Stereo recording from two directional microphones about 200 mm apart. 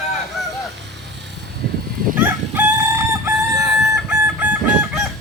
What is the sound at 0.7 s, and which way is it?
Vehicle, 65° right (ahead or behind).